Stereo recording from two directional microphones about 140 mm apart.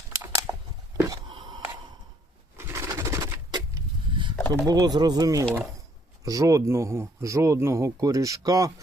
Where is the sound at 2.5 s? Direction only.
20° right (ahead or behind).